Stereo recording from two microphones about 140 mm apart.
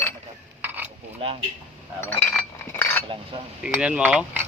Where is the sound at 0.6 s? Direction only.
15° right (ahead or behind).